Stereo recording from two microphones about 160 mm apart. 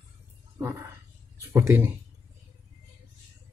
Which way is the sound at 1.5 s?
15° right (ahead or behind).